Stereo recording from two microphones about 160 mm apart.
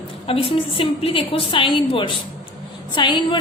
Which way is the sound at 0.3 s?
35° left (ahead or behind).